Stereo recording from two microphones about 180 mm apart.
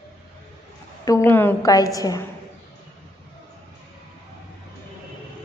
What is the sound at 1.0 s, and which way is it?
A woman's voice, 15° left (ahead or behind).